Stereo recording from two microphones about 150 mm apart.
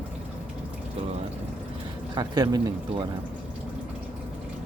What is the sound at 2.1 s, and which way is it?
Speech, 25° right (ahead or behind).